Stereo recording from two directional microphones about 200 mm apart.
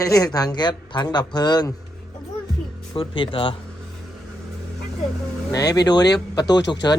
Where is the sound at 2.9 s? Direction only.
25° left (ahead or behind).